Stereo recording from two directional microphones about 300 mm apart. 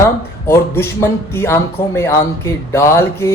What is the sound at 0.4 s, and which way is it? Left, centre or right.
Speech, centre.